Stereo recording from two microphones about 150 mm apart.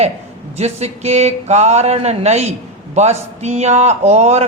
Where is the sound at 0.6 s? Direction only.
45° right (ahead or behind).